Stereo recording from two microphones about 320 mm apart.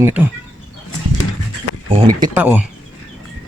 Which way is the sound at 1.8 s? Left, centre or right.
Centre.